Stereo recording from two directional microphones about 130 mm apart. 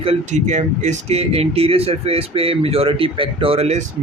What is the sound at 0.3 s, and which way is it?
Speech, 65° right (ahead or behind).